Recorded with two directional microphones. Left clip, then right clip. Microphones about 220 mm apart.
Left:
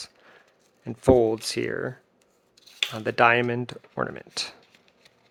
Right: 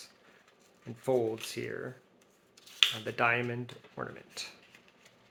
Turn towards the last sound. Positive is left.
turn(degrees=45)  # may be behind; listen again after turning